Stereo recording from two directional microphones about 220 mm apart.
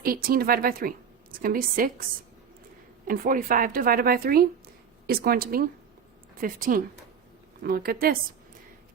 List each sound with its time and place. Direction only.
0.0 s speech: 40° right (ahead or behind)
3.1 s speech: 40° right (ahead or behind)